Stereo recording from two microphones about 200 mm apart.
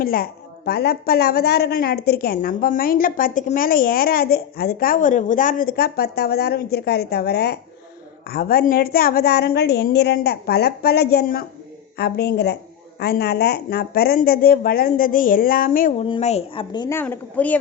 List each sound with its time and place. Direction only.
0.0 s a woman's voice: 45° left (ahead or behind); by 17.0 s 20° left (ahead or behind)
17.0 s a woman's voice: 10° left (ahead or behind)